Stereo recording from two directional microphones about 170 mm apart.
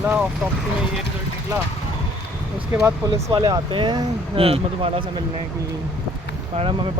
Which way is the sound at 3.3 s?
25° right (ahead or behind).